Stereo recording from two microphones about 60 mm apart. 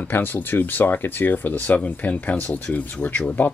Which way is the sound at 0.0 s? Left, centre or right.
Left.